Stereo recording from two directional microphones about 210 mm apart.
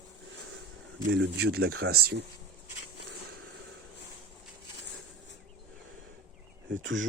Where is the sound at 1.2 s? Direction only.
50° right (ahead or behind).